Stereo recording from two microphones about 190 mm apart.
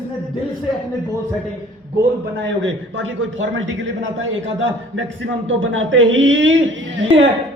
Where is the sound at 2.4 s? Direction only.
80° right.